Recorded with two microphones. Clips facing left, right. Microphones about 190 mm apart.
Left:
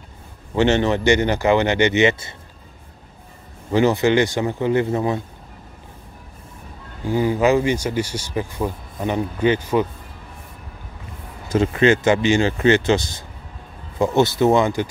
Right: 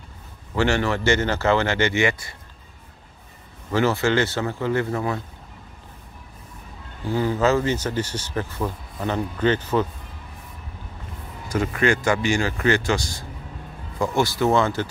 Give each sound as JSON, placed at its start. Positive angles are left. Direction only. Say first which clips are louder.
{"t": 0.6, "sound": "speech", "louder": "left 4 dB", "side_deg": 20}
{"t": 3.7, "sound": "speech", "louder": "left 4 dB", "side_deg": 20}
{"t": 7.1, "sound": "speech", "louder": "left 3 dB", "side_deg": 15}
{"t": 11.4, "sound": "speech", "louder": "left 5 dB", "side_deg": 25}